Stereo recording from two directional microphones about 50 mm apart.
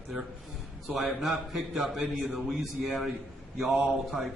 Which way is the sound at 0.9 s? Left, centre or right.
Centre.